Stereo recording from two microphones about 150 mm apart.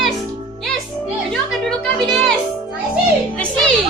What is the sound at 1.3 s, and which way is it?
Music, centre (ahead or behind).